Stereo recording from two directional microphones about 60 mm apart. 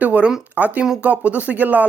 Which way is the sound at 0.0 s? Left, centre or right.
Right.